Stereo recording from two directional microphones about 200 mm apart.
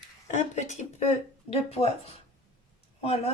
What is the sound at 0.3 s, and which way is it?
Speech, 35° left (ahead or behind).